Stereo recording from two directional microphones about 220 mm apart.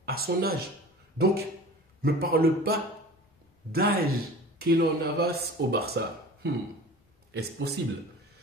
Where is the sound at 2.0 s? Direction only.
45° right (ahead or behind).